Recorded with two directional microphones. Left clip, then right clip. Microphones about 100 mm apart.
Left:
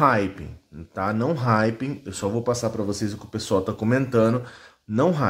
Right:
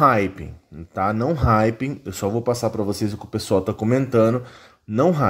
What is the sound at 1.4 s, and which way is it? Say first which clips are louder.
Speech: right 3 dB; 40° right (ahead or behind).